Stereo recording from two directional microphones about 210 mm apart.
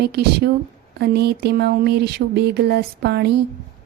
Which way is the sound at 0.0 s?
50° right (ahead or behind).